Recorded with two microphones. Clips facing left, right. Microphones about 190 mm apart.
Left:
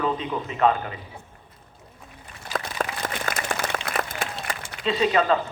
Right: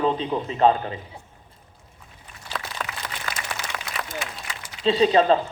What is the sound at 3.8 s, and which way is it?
Applause, 55° left (ahead or behind).